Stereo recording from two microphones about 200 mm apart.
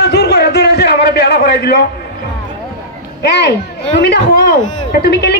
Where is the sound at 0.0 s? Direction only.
55° left (ahead or behind).